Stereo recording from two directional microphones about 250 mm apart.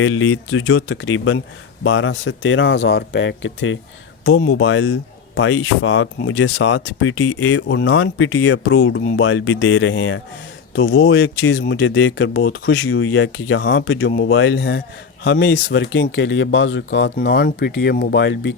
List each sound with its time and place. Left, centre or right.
0.0 s speech: left